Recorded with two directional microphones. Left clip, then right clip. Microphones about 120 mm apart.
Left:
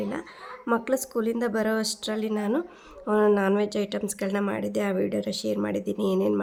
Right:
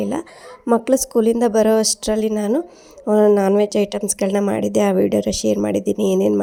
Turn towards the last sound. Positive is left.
turn(degrees=-45)  # may be behind; listen again after turning